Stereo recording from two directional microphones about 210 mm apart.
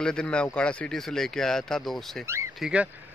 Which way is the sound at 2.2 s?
15° right (ahead or behind).